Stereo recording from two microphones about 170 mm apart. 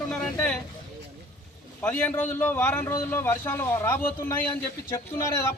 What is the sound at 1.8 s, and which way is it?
A man's voice, 10° left (ahead or behind).